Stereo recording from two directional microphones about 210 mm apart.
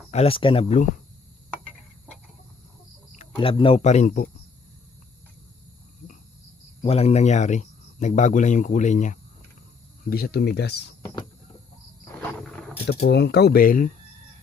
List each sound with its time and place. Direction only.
0.1 s speech: 30° left (ahead or behind)
3.3 s speech: 25° left (ahead or behind)
6.8 s speech: 30° left (ahead or behind)
10.1 s speech: 45° left (ahead or behind)
11.0 s power windows: 20° left (ahead or behind)
12.2 s wild animals: 5° left (ahead or behind)
13.1 s speech: 55° left (ahead or behind)